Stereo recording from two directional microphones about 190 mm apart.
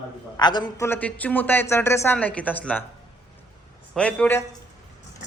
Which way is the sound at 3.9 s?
5° left (ahead or behind).